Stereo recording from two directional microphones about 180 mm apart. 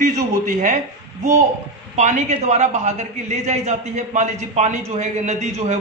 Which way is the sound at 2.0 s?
40° right (ahead or behind).